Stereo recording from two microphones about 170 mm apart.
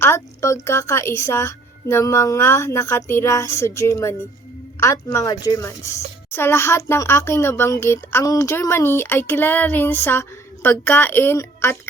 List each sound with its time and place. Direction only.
0.0 s a woman's voice: 15° left (ahead or behind)